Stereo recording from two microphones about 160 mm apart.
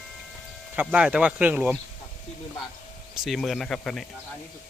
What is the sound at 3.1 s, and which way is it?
Speech, centre (ahead or behind).